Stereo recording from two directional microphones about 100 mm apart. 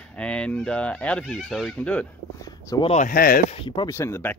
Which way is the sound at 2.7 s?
40° left (ahead or behind).